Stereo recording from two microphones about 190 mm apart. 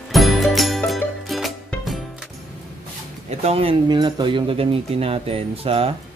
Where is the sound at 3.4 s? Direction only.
30° right (ahead or behind).